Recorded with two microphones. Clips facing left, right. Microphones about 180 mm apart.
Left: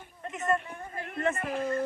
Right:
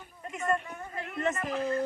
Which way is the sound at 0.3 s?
45° left (ahead or behind).